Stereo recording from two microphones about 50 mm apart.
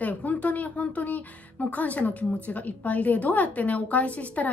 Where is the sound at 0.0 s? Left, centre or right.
Left.